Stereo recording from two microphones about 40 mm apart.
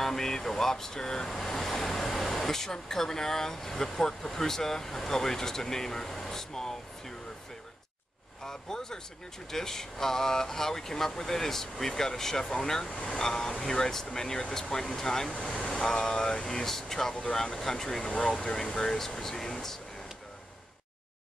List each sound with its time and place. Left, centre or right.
0.0 s speech: centre
8.5 s speech: centre
18.0 s speech: left